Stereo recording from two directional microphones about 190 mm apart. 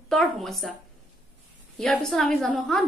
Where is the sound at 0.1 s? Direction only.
Centre (ahead or behind).